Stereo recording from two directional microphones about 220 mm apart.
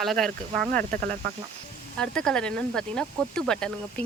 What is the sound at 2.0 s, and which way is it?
Speech, 5° left (ahead or behind).